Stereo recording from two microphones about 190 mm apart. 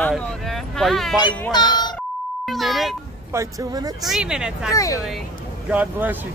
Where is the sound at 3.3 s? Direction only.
20° right (ahead or behind).